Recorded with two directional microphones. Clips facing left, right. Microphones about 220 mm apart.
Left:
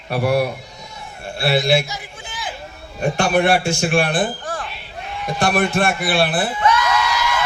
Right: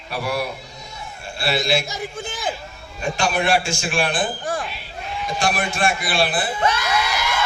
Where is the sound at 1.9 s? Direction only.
45° right (ahead or behind).